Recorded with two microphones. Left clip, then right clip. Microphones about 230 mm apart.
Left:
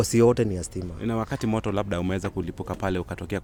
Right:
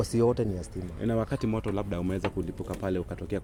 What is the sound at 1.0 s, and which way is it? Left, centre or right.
Speech, centre.